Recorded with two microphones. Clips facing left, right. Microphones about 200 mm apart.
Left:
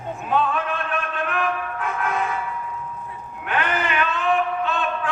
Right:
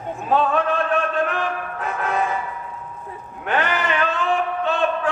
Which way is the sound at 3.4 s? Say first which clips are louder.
Right 2 dB; 40° right (ahead or behind).